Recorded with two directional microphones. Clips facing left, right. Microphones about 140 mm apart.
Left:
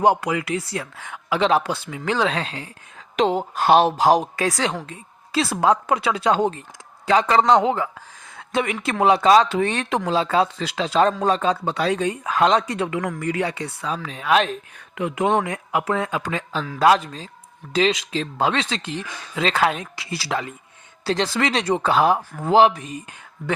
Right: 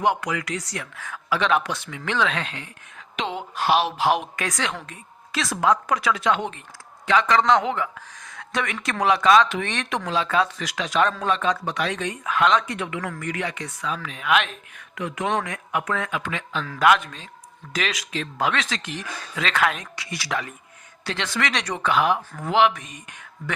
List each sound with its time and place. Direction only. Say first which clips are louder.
0.0 s speech: left 5 dB; 35° left (ahead or behind)